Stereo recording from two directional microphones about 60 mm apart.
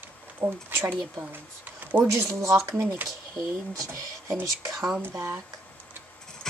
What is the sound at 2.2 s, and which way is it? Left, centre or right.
Speech, right.